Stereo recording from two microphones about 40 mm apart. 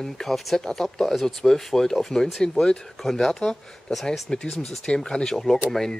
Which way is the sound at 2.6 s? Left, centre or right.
Left.